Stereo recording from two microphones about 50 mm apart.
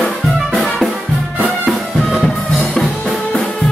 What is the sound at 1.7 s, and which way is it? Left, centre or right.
Music, centre.